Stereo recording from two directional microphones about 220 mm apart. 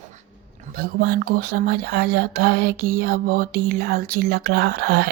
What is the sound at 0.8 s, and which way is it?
Speech, 45° right (ahead or behind).